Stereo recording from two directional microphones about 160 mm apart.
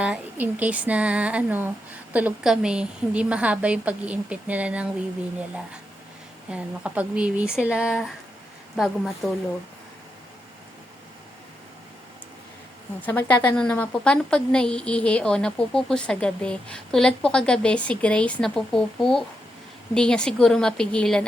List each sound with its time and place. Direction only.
0.0 s a woman's voice: 10° right (ahead or behind)
6.5 s a woman's voice: 10° right (ahead or behind)
13.0 s a woman's voice: 10° left (ahead or behind)